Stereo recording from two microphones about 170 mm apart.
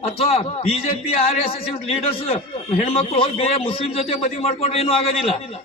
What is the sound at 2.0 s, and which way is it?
A man's voice, 35° left (ahead or behind).